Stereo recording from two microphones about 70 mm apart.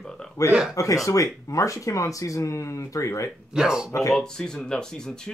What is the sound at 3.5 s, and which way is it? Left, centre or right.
Speech, centre.